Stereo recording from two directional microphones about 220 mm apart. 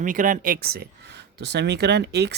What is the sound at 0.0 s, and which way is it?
A man's voice, 35° right (ahead or behind).